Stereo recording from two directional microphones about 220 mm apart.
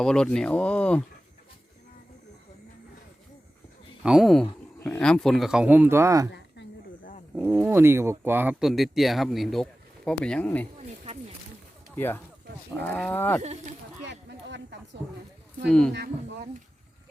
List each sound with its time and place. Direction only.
0.0 s speech: 5° left (ahead or behind)
4.0 s speech: centre (ahead or behind)
6.3 s chop: 50° left (ahead or behind)
7.3 s speech: 10° right (ahead or behind)
10.8 s a sound: 30° right (ahead or behind)
11.9 s speech: 10° left (ahead or behind)
14.1 s a sound: 55° right (ahead or behind)
15.9 s speech: 50° right (ahead or behind)